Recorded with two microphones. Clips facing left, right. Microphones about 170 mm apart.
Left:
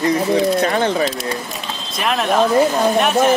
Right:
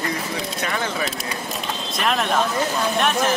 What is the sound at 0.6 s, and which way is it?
Speech, 30° left (ahead or behind).